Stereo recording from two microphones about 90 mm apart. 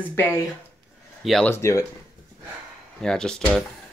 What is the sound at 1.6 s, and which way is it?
Speech, 30° left (ahead or behind).